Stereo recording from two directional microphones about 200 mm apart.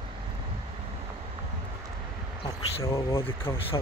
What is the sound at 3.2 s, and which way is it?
Speech, 25° left (ahead or behind).